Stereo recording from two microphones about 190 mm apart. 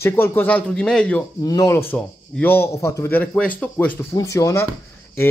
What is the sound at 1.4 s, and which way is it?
A man's voice, 20° left (ahead or behind).